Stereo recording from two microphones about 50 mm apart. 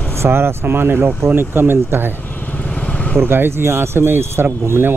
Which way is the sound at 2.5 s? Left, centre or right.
Left.